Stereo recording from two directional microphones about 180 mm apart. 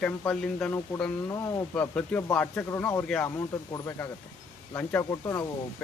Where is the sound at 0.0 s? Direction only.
5° left (ahead or behind).